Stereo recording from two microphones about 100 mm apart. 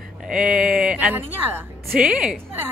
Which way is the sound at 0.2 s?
10° right (ahead or behind).